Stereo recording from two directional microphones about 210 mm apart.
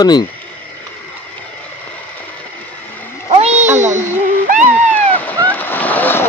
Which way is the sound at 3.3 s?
30° right (ahead or behind).